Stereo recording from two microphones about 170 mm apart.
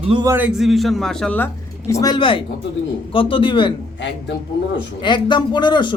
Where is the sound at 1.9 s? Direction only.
20° left (ahead or behind).